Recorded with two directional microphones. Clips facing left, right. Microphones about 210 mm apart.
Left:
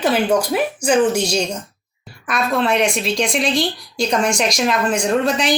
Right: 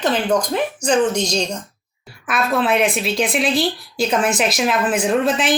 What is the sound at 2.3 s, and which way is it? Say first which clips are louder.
A woman's voice: even; centre (ahead or behind).